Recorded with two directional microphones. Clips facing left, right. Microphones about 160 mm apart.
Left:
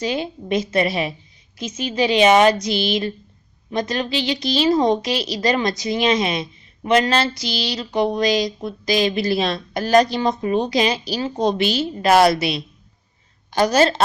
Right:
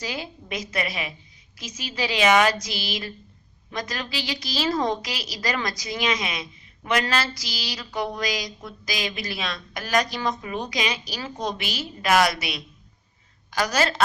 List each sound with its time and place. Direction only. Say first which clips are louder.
0.0 s a woman's voice: left 9 dB; 25° left (ahead or behind)